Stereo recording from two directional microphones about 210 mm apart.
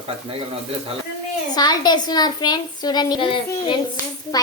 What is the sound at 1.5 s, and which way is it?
A child's voice, 20° left (ahead or behind).